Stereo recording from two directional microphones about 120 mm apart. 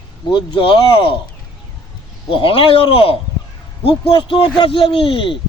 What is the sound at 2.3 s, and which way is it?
A man's voice, 50° left (ahead or behind).